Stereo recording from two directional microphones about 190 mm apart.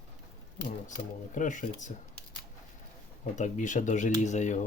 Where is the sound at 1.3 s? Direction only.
40° left (ahead or behind).